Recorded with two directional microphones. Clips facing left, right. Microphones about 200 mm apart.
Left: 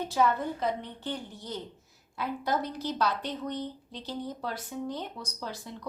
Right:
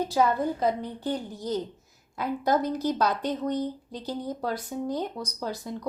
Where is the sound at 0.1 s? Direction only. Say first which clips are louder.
Even; 35° right (ahead or behind).